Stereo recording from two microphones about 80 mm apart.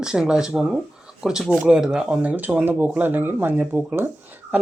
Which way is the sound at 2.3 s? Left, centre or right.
Right.